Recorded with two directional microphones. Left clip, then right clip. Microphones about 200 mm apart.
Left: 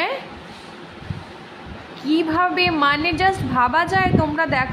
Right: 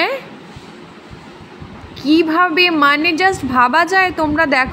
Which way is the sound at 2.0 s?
15° right (ahead or behind).